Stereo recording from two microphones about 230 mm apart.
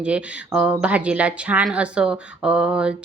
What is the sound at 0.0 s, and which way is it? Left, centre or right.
Speech, centre.